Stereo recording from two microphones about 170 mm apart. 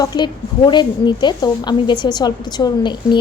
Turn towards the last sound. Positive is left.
turn(degrees=25)  # may be behind; listen again after turning